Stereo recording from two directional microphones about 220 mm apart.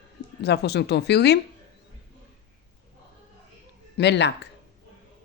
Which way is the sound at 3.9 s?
50° left (ahead or behind).